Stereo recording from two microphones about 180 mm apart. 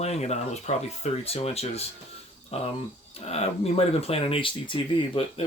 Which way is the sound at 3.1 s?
35° left (ahead or behind).